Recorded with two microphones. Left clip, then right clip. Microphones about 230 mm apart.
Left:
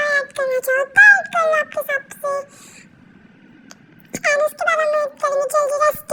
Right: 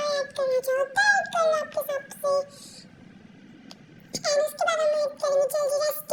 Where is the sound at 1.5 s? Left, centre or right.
Left.